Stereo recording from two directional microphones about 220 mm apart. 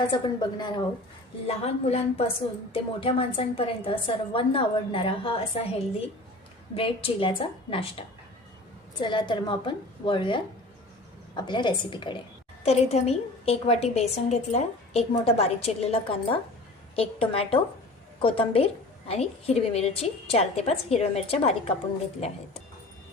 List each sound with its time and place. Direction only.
0.1 s a woman's voice: 20° left (ahead or behind)
6.7 s a woman's voice: 25° left (ahead or behind)